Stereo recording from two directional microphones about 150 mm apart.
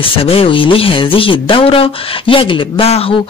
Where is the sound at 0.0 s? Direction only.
40° left (ahead or behind).